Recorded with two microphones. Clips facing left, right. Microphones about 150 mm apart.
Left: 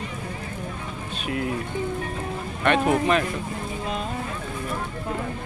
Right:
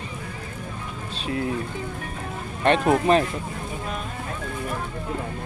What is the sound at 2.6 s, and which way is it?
Speech, 35° right (ahead or behind).